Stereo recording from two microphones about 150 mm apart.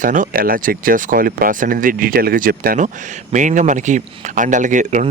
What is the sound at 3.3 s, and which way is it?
Speech, 55° right (ahead or behind).